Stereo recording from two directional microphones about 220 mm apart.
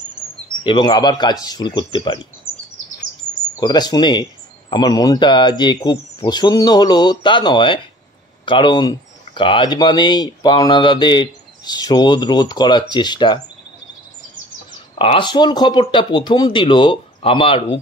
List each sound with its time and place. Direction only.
0.7 s speech: 20° left (ahead or behind)
3.5 s speech: 20° left (ahead or behind)
15.0 s speech: 20° left (ahead or behind)